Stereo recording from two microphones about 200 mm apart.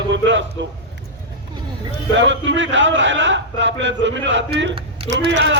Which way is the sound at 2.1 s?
65° right (ahead or behind).